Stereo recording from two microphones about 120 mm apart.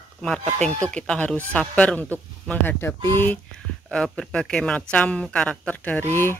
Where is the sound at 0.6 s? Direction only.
5° left (ahead or behind).